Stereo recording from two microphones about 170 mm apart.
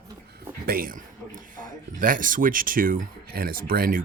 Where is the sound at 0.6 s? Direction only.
60° right (ahead or behind).